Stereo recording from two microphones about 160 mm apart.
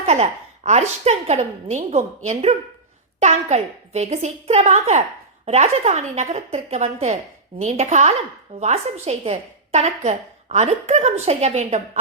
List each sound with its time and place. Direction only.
0.0 s a woman's voice: 40° right (ahead or behind)